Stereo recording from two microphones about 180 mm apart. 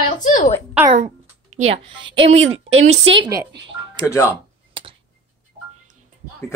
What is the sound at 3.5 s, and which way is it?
Music, 85° right.